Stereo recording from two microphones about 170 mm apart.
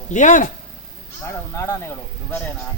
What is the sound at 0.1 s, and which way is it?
Speech, 45° left (ahead or behind).